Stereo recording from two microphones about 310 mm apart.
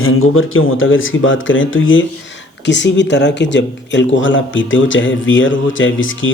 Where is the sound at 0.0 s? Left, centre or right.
Left.